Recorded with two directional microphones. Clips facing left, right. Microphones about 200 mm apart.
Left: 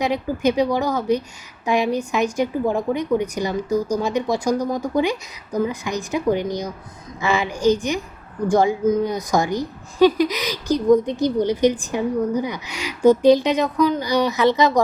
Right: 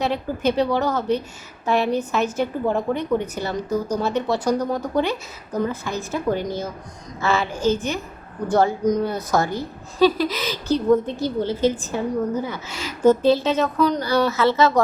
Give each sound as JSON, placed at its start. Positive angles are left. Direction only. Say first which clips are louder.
{"t": 0.0, "sound": "speech", "louder": "left 2 dB", "side_deg": 15}